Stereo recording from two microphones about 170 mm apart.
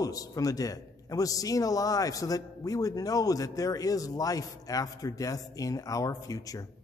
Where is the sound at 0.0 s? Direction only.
20° left (ahead or behind).